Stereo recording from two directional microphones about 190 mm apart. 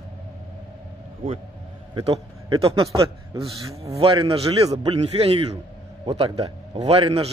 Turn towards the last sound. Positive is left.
turn(degrees=-30)  # may be behind; listen again after turning